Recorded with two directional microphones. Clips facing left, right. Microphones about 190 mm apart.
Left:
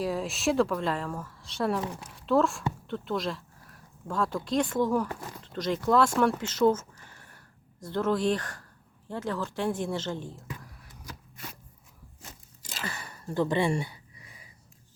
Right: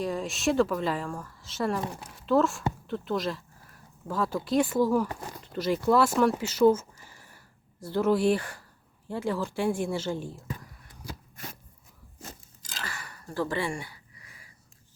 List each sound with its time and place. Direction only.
0.0 s a woman's voice: centre (ahead or behind)
10.6 s whispering: centre (ahead or behind)
12.8 s a sound: 25° left (ahead or behind)